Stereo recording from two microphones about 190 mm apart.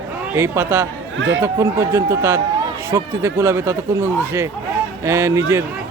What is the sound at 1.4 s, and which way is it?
Speech, 15° right (ahead or behind).